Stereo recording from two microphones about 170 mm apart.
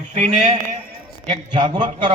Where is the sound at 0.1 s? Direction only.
45° right (ahead or behind).